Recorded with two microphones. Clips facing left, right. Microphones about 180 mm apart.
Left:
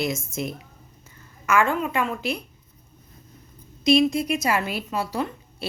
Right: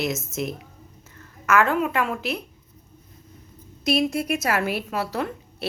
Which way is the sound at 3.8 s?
5° right (ahead or behind).